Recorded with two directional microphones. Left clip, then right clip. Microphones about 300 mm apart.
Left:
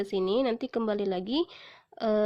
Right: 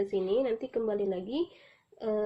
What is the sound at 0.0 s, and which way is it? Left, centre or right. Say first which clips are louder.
A woman's voice: left 1 dB; left.